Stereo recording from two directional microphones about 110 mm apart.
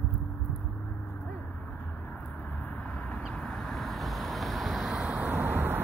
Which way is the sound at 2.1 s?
15° left (ahead or behind).